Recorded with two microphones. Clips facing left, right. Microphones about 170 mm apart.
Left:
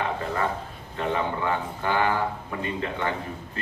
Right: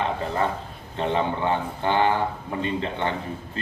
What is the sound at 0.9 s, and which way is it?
Speech, 25° right (ahead or behind).